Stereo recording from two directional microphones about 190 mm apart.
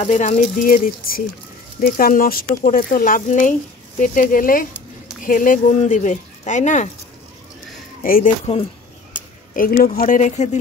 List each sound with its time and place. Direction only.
0.0 s speech: 40° left (ahead or behind)
8.0 s speech: 45° left (ahead or behind)
8.5 s speech: 35° left (ahead or behind)
9.5 s speech: 45° left (ahead or behind)